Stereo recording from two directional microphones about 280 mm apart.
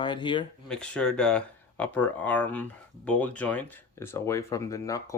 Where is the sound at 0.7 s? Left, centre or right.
Centre.